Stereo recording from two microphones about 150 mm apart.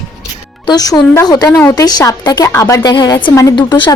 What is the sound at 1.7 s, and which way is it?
A woman's voice, 25° left (ahead or behind).